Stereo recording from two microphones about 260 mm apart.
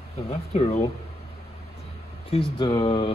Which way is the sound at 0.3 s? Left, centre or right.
Left.